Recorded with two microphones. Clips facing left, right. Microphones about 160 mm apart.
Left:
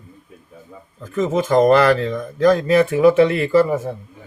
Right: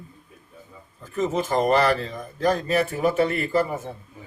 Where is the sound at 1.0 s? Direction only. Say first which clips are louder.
Left 5 dB; 90° left.